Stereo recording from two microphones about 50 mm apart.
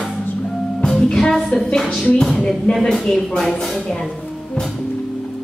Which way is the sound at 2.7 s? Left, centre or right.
Left.